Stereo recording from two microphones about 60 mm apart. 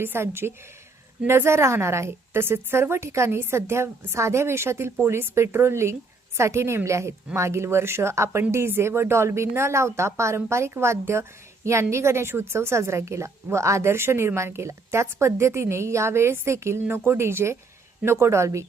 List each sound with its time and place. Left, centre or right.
0.0 s speech: right